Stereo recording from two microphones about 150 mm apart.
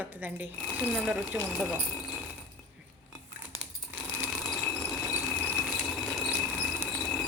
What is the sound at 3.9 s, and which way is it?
Sewing machine, 10° right (ahead or behind).